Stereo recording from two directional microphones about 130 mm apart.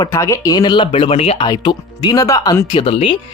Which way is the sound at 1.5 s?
35° left (ahead or behind).